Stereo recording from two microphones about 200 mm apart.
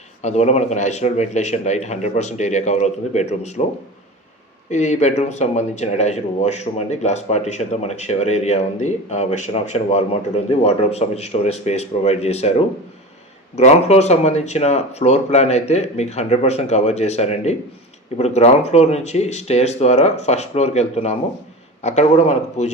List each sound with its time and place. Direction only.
0.2 s speech: 35° left (ahead or behind)
4.7 s a man's voice: 35° left (ahead or behind)